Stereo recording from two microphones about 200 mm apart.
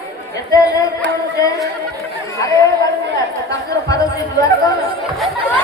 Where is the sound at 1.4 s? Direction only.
15° left (ahead or behind).